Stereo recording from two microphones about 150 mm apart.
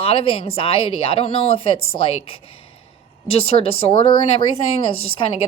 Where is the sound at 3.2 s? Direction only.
40° left (ahead or behind).